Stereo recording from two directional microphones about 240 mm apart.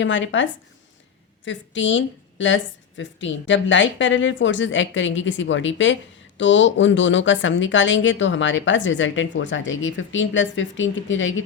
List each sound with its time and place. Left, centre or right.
0.0 s a woman's voice: left
1.5 s a woman's voice: left